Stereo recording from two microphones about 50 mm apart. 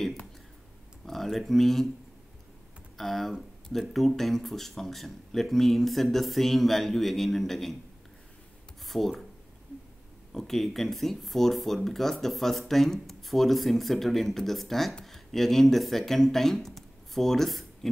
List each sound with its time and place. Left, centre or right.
1.0 s speech: centre
3.0 s speech: centre
8.8 s a sound: centre
10.3 s speech: centre